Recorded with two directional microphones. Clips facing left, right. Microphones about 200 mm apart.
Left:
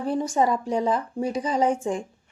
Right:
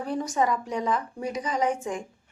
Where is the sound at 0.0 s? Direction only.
30° left (ahead or behind).